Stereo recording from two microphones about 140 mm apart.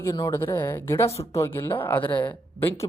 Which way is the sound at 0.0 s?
20° left (ahead or behind).